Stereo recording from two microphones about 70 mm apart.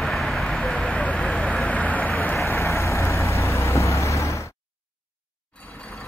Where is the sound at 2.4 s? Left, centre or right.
Left.